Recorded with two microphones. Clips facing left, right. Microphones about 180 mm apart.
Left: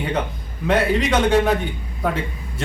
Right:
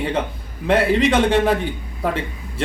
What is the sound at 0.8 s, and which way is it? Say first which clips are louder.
Speech: right 3 dB; 30° right (ahead or behind).